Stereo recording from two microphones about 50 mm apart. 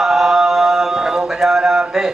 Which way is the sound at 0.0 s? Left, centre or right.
Centre.